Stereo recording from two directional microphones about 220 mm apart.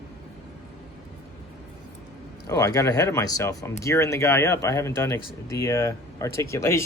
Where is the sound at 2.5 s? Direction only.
15° left (ahead or behind).